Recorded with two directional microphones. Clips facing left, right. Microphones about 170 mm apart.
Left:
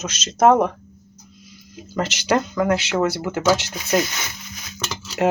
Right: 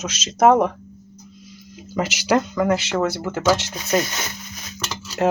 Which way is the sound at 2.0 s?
5° right (ahead or behind).